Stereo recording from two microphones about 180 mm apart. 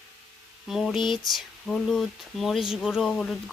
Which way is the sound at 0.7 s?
Centre (ahead or behind).